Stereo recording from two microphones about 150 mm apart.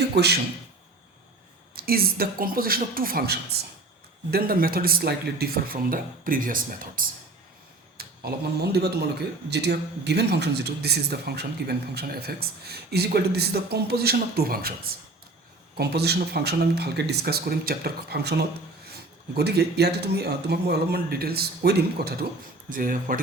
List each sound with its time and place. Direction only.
0.2 s a man's voice: 90° right
1.7 s a man's voice: 90° right; by 7.0 s 70° right (ahead or behind)
7.9 s a man's voice: 90° right
22.7 s speech: 65° right (ahead or behind)